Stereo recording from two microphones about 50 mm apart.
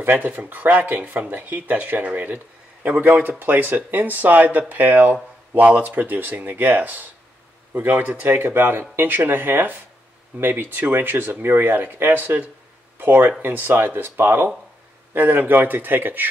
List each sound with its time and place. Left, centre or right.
0.2 s speech: right
15.1 s speech: right